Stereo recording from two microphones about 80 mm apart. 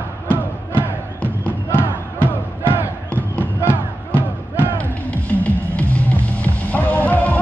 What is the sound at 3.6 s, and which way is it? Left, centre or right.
Music, right.